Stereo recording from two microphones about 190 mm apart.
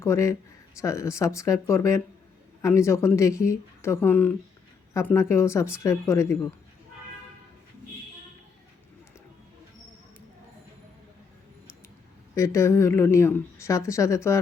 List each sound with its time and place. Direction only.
0.0 s speech: 15° left (ahead or behind)
12.3 s speech: 15° left (ahead or behind)